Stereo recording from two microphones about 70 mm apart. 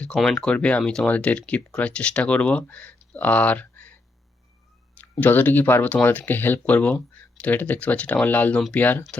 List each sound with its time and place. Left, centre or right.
0.1 s speech: centre
5.2 s speech: left